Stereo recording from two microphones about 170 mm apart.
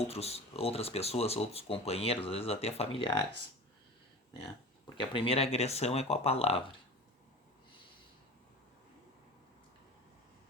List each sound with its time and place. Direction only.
0.1 s speech: 35° left (ahead or behind)
5.1 s speech: 35° left (ahead or behind)